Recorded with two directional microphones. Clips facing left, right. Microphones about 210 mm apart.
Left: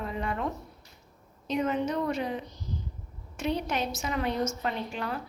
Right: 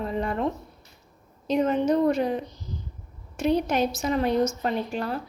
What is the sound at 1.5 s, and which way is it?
A woman's voice, 35° right (ahead or behind).